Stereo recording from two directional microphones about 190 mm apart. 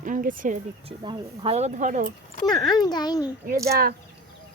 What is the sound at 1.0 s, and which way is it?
Speech, 25° right (ahead or behind).